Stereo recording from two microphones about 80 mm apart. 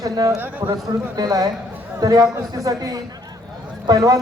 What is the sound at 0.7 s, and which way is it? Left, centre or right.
A man's voice, right.